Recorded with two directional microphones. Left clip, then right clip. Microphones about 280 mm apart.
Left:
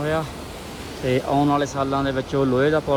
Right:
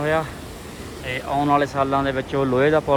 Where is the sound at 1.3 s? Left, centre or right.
Centre.